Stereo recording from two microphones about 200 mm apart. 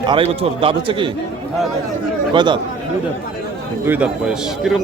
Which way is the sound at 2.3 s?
25° right (ahead or behind).